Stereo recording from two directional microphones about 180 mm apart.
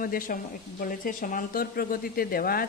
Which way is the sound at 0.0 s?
50° left (ahead or behind).